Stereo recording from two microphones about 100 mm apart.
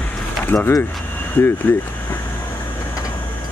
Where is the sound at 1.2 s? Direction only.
20° left (ahead or behind).